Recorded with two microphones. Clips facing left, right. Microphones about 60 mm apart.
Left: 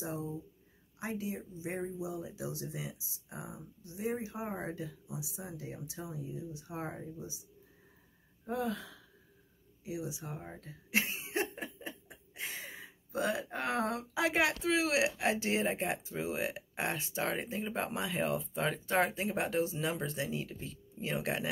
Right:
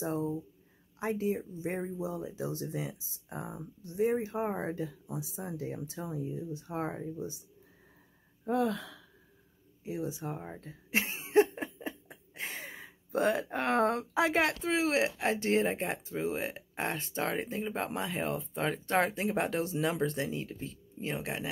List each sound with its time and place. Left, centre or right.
0.0 s speech: right
8.5 s speech: right
9.8 s speech: right
10.6 s a sound: right
14.6 s speech: right
20.1 s speech: right